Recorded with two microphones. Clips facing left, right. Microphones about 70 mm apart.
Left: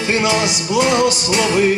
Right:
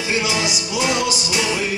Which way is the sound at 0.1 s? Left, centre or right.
Left.